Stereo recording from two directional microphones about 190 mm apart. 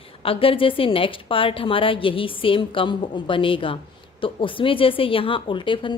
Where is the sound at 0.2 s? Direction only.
30° left (ahead or behind).